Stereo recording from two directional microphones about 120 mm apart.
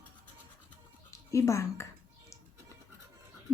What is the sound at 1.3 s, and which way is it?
Speech, 25° left (ahead or behind).